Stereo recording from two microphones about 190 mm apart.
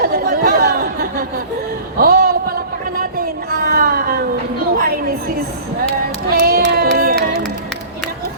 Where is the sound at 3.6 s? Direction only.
50° right (ahead or behind).